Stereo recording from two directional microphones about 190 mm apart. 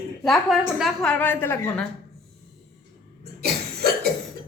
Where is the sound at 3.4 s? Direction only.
55° right (ahead or behind).